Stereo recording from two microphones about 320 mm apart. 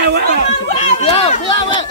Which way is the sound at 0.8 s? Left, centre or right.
Centre.